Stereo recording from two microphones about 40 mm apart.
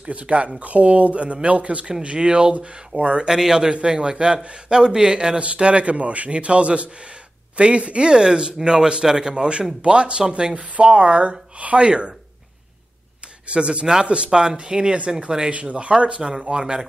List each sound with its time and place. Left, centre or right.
0.0 s a man's voice: right
3.3 s a man's voice: centre
10.5 s a man's voice: right
11.8 s speech: right
13.5 s speech: right
14.4 s speech: centre
15.5 s speech: right